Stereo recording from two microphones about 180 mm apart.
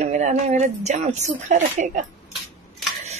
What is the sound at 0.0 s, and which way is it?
A woman's voice, 40° right (ahead or behind).